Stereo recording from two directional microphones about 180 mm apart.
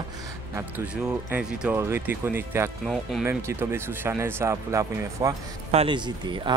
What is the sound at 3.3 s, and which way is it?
Speech, 15° right (ahead or behind).